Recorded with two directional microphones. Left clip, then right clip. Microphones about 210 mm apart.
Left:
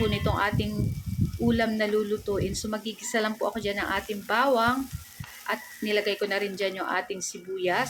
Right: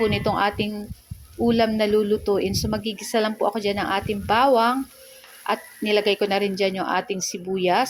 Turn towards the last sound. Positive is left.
turn(degrees=-25)  # may be behind; listen again after turning